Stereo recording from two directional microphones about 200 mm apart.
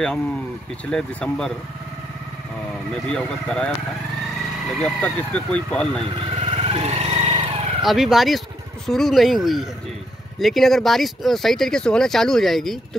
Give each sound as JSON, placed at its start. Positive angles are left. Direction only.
{"t": 0.8, "sound": "speech", "side_deg": 5}
{"t": 2.9, "sound": "speech", "side_deg": 5}
{"t": 6.4, "sound": "vehicle", "side_deg": -30}
{"t": 7.8, "sound": "speech", "side_deg": 0}